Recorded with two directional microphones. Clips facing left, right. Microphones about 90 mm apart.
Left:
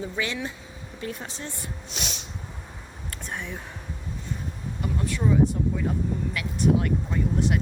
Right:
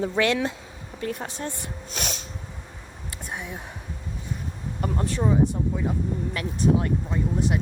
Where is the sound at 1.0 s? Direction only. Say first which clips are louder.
Right 4 dB; 50° right (ahead or behind).